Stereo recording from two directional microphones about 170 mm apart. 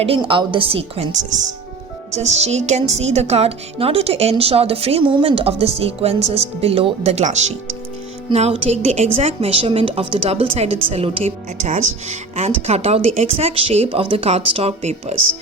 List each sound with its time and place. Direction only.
0.0 s a woman's voice: 30° right (ahead or behind)